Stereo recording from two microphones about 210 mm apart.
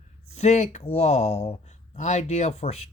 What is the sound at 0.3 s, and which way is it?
Speech, 35° left (ahead or behind).